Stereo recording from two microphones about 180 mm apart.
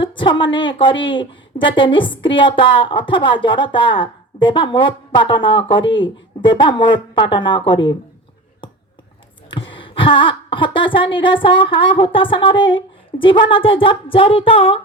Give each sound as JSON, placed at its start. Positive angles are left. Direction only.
{"t": 0.0, "sound": "a woman's voice", "side_deg": 30}
{"t": 9.5, "sound": "a woman's voice", "side_deg": 30}